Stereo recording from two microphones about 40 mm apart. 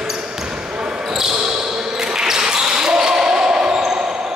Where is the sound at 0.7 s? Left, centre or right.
Centre.